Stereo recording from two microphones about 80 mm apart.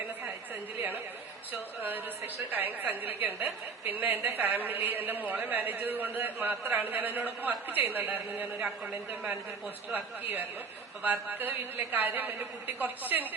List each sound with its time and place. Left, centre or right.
0.8 s a woman's voice: right
9.9 s a woman's voice: right